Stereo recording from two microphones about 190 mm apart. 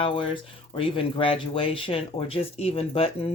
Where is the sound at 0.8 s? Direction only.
30° left (ahead or behind).